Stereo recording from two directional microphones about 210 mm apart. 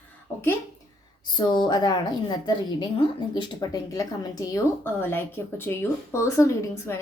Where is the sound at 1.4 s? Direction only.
20° left (ahead or behind).